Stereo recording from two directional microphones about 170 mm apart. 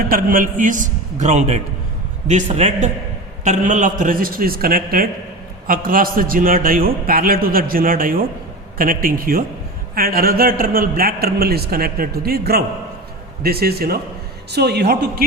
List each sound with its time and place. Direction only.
0.1 s a man's voice: 55° right (ahead or behind); by 15.2 s 75° right (ahead or behind)